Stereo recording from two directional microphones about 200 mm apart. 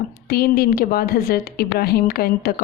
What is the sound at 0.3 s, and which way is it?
A woman's voice, 50° left (ahead or behind).